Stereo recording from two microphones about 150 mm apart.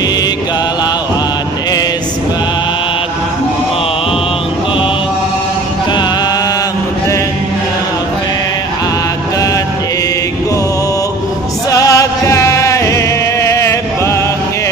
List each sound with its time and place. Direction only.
11.7 s music: 20° left (ahead or behind)